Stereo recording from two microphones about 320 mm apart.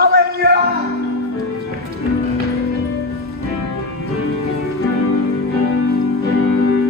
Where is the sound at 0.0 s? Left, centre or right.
Right.